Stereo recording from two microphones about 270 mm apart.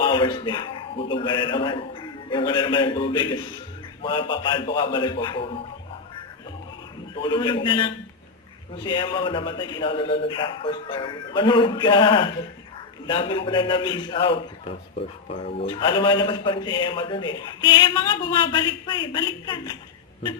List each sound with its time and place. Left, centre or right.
0.0 s a man's voice: centre
7.2 s a man's voice: centre
15.5 s a man's voice: centre